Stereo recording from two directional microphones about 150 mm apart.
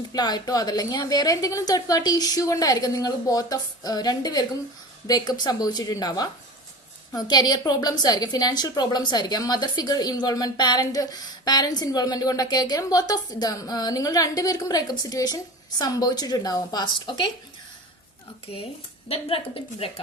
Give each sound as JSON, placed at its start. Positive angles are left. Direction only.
{"t": 0.1, "sound": "a woman's voice", "side_deg": 25}
{"t": 19.0, "sound": "a woman's voice", "side_deg": 40}